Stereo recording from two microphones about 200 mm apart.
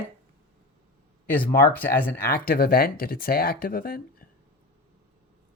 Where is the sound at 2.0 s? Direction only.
50° left (ahead or behind).